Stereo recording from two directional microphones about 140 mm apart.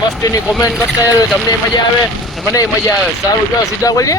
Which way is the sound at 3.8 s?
25° left (ahead or behind).